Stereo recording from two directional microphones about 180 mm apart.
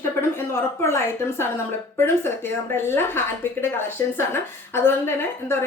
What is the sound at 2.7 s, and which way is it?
A woman's voice, 10° left (ahead or behind).